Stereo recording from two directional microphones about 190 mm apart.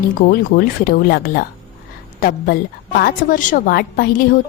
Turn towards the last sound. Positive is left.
turn(degrees=50)  # may be behind; listen again after turning